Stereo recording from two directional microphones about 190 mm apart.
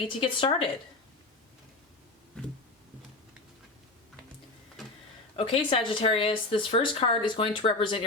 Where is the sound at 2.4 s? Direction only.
5° left (ahead or behind).